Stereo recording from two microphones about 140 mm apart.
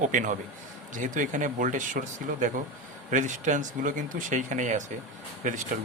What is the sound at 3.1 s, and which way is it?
Speech, 65° right (ahead or behind).